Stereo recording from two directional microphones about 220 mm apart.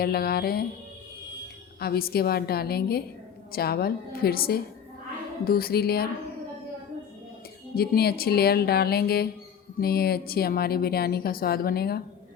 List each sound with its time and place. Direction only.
0.0 s a woman's voice: 45° left (ahead or behind)
1.8 s a woman's voice: 45° left (ahead or behind)
7.8 s a woman's voice: 45° left (ahead or behind)